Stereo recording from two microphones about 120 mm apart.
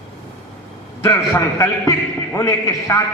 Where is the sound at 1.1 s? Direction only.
25° left (ahead or behind).